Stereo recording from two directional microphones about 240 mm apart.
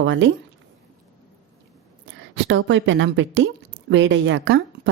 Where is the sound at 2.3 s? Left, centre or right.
Right.